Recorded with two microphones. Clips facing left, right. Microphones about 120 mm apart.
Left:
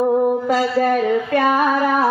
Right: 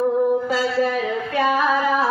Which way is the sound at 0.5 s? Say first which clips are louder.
Left 4 dB; 50° left (ahead or behind).